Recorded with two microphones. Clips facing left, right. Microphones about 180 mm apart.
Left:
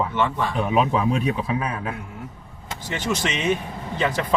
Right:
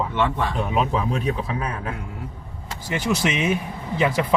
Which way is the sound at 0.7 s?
5° left (ahead or behind).